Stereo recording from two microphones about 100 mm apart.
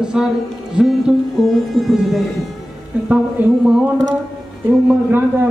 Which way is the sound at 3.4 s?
20° right (ahead or behind).